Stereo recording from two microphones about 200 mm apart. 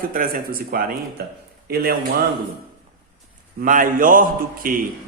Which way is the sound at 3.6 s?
40° right (ahead or behind).